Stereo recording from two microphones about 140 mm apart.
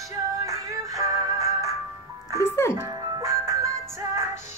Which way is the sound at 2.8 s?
20° right (ahead or behind).